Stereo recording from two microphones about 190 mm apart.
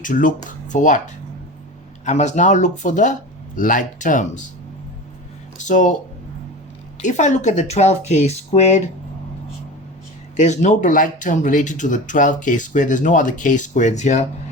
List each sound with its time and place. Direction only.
0.0 s speech: 45° left (ahead or behind)
5.5 s speech: 40° left (ahead or behind)
7.0 s speech: 40° left (ahead or behind)
10.3 s speech: 40° left (ahead or behind)